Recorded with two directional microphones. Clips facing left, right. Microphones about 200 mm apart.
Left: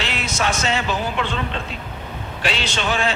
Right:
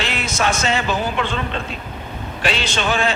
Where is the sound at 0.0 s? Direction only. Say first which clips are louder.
Right 2 dB; 50° right (ahead or behind).